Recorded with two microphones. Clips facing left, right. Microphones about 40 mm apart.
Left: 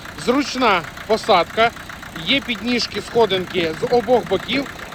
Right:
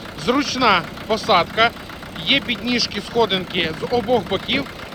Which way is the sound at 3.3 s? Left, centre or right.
Right.